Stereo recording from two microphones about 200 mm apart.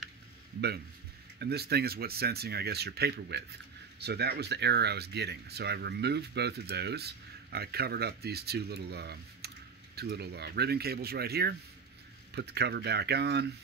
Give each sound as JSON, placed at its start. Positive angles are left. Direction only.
{"t": 1.4, "sound": "speech", "side_deg": -55}